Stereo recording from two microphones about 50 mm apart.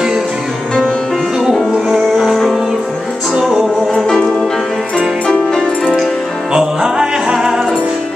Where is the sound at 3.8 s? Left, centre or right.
Centre.